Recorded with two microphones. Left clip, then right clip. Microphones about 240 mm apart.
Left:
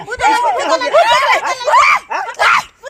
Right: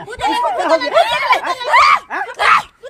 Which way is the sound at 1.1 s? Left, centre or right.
Centre.